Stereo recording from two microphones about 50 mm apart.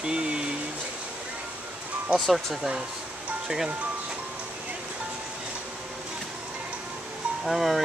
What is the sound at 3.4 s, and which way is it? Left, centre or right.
Speech, centre.